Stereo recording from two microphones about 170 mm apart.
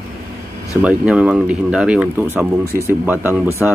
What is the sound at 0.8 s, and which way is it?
Speech, 5° right (ahead or behind).